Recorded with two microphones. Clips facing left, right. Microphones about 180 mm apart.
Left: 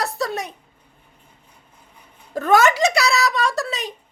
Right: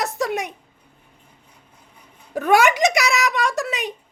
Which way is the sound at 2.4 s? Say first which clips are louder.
Even; 15° right (ahead or behind).